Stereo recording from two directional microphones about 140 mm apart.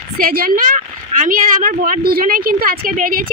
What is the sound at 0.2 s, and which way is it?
A woman's voice, 90° right.